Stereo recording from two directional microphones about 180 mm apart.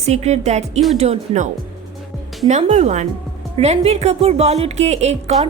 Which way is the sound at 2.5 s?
40° right (ahead or behind).